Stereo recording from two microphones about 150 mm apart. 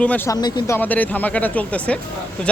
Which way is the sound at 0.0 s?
10° left (ahead or behind).